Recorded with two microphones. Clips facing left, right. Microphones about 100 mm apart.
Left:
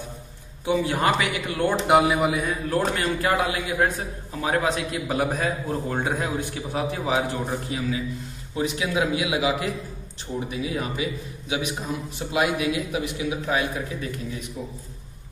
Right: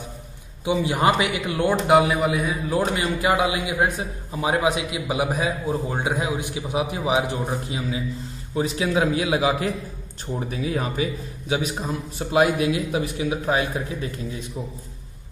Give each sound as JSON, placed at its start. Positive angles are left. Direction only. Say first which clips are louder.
{"t": 0.7, "sound": "a man's voice", "louder": "right 2 dB", "side_deg": -20}
{"t": 1.9, "sound": "a man's voice", "louder": "even", "side_deg": 0}
{"t": 2.7, "sound": "a man's voice", "louder": "right 1 dB", "side_deg": -15}